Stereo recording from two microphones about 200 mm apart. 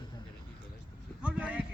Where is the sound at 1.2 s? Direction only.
5° right (ahead or behind).